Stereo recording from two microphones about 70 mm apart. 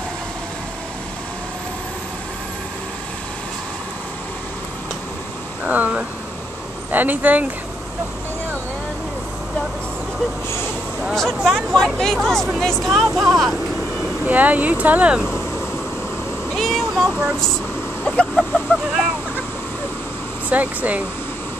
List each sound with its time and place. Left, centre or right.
5.6 s speech: right
11.4 s speech: centre
14.2 s speech: right
16.5 s a sound: centre
18.3 s vehicle: centre
20.4 s speech: right